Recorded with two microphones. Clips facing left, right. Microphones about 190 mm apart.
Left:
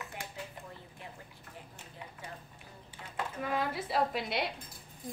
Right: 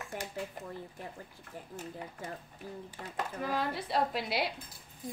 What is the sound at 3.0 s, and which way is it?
Speech, 45° right (ahead or behind).